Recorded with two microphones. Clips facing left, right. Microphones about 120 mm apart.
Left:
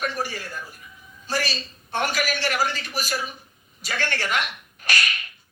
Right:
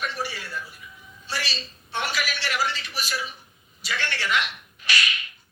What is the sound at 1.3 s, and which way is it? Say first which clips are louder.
A man's voice: left 5 dB; 45° left (ahead or behind).